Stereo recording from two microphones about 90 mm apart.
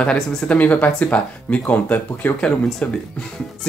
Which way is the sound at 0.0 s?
10° left (ahead or behind).